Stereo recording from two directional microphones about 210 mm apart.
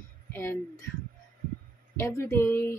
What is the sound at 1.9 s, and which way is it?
Speech, 10° left (ahead or behind).